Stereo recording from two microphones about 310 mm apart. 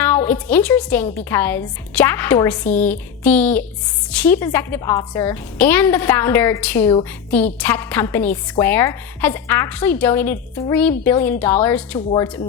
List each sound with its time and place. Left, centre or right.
0.1 s a woman's voice: centre